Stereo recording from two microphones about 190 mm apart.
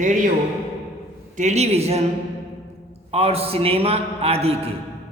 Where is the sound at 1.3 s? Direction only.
35° right (ahead or behind).